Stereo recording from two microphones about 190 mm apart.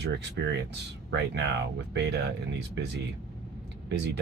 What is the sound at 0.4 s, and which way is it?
Speech, 60° right (ahead or behind).